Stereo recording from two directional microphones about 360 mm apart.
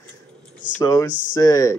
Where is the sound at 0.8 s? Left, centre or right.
Centre.